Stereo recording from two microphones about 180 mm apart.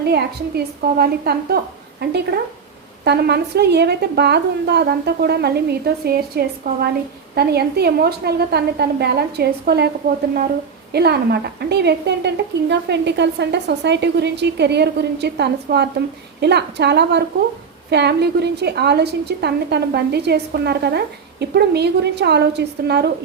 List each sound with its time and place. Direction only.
0.0 s speech: 65° right (ahead or behind)
10.9 s a woman's voice: 65° right (ahead or behind)